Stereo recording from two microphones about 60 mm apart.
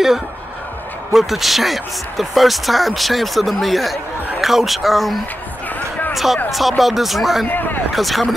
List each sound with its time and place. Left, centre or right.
1.1 s speech: centre
7.4 s speech: left
7.9 s speech: centre